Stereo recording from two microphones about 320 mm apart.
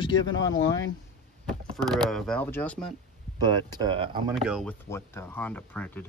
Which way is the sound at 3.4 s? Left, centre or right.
Centre.